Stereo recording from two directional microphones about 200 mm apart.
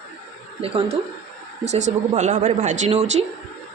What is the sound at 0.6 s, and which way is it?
A woman's voice, 30° right (ahead or behind).